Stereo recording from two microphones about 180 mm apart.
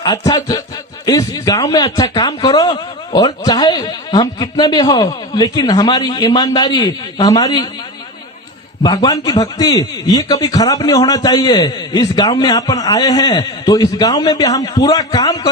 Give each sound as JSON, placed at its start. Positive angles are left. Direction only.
{"t": 0.0, "sound": "a man's voice", "side_deg": 20}
{"t": 8.8, "sound": "a man's voice", "side_deg": 25}